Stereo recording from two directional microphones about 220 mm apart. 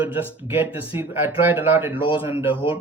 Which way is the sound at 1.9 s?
25° left (ahead or behind).